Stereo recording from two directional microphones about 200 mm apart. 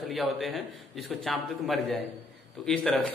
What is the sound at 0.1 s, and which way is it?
A man's voice, centre (ahead or behind).